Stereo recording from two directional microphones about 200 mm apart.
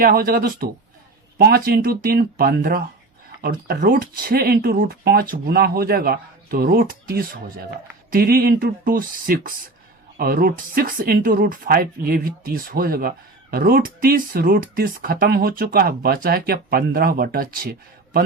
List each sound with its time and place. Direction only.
0.0 s speech: 45° right (ahead or behind)